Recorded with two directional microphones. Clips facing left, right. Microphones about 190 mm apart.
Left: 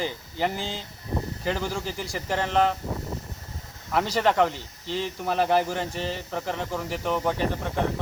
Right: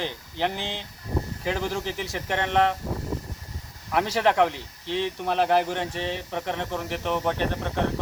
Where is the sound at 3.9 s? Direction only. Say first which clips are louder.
Even; centre (ahead or behind).